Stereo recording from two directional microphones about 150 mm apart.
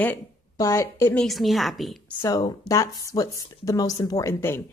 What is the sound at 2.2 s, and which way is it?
Speech, 25° left (ahead or behind).